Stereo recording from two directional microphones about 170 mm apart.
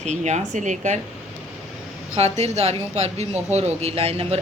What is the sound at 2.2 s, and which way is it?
Speech, 40° right (ahead or behind).